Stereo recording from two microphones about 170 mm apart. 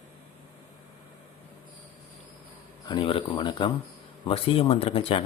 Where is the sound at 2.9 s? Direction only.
30° left (ahead or behind).